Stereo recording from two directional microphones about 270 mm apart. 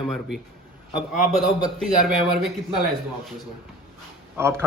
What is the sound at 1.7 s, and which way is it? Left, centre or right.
A man's voice, centre.